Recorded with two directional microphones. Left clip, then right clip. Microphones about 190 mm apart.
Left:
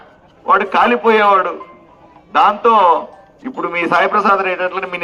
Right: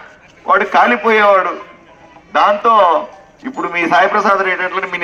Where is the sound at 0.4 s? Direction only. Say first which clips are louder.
Right 1 dB; 20° left (ahead or behind).